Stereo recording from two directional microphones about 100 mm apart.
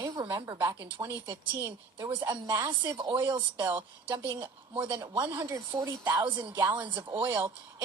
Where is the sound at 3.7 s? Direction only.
20° right (ahead or behind).